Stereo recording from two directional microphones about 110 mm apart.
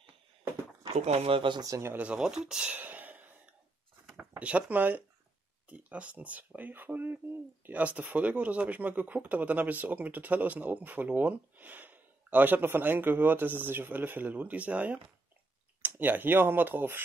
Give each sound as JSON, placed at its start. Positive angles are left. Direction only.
{"t": 0.9, "sound": "speech", "side_deg": -75}
{"t": 1.6, "sound": "speech", "side_deg": -25}
{"t": 2.0, "sound": "speech", "side_deg": -10}
{"t": 4.4, "sound": "speech", "side_deg": -10}